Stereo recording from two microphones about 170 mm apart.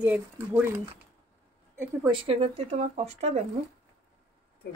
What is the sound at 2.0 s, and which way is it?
Speech, 30° right (ahead or behind).